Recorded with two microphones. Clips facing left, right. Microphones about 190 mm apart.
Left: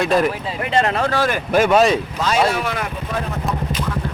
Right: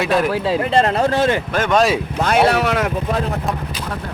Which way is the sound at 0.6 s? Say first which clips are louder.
Even; 35° right (ahead or behind).